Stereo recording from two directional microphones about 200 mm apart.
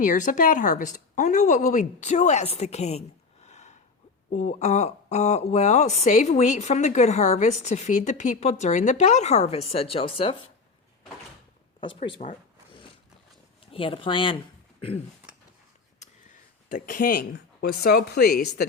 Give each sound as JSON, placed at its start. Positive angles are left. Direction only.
{"t": 0.0, "sound": "speech", "side_deg": 40}
{"t": 3.4, "sound": "a sound", "side_deg": 35}
{"t": 4.3, "sound": "speech", "side_deg": 35}
{"t": 11.8, "sound": "speech", "side_deg": 25}
{"t": 13.7, "sound": "speech", "side_deg": 25}
{"t": 16.6, "sound": "speech", "side_deg": 45}